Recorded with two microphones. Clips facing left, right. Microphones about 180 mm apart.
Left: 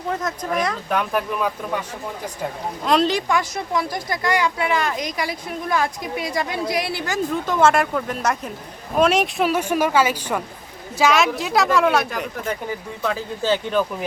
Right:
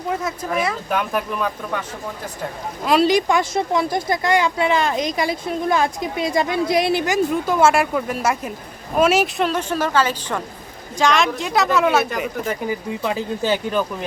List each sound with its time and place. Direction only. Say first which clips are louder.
0.1 s speech: right 1 dB; 10° right (ahead or behind)
2.8 s speech: right 3 dB; 5° right (ahead or behind)
9.4 s a woman's voice: left 1 dB; 10° left (ahead or behind)
13.0 s speech: left 1 dB; 15° right (ahead or behind)